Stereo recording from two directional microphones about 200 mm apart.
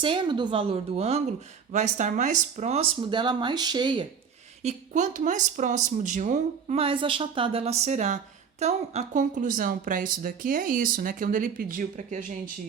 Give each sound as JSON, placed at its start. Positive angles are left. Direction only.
{"t": 0.0, "sound": "speech", "side_deg": -25}
{"t": 4.6, "sound": "speech", "side_deg": -35}